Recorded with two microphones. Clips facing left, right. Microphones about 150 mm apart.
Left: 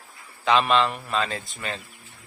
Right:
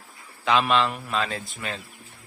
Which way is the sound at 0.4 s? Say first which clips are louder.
Left 1 dB; centre (ahead or behind).